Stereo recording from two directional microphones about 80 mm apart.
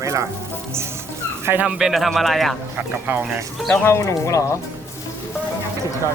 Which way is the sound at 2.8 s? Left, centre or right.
Right.